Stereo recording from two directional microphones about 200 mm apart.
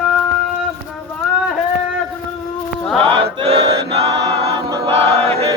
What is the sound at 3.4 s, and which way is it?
Choir, 30° right (ahead or behind).